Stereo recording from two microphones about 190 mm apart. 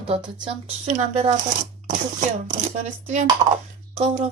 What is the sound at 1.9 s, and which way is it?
Speech, 40° right (ahead or behind).